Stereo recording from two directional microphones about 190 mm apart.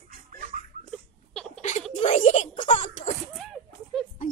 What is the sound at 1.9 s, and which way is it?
Speech, 35° left (ahead or behind).